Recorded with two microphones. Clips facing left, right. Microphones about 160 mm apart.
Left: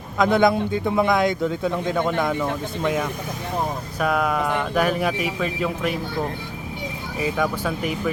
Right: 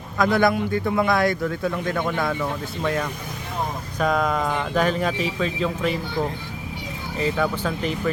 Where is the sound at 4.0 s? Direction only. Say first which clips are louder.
Even; 10° left (ahead or behind).